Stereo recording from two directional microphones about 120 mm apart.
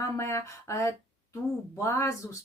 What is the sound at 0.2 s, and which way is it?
Speech, 25° left (ahead or behind).